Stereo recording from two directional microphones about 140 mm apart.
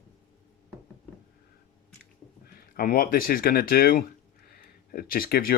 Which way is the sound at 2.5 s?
90° left.